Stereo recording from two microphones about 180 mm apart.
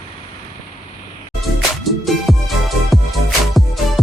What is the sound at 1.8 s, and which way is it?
Music, centre (ahead or behind).